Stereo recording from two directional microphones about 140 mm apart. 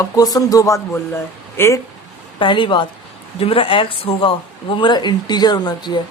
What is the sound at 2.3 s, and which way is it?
A woman's voice, 35° left (ahead or behind).